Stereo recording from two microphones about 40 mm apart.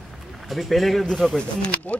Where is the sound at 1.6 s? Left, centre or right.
Left.